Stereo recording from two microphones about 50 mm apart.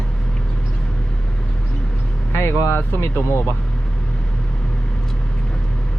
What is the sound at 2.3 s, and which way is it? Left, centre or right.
Speech, left.